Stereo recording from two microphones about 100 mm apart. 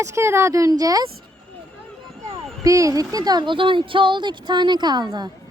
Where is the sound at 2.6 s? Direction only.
35° right (ahead or behind).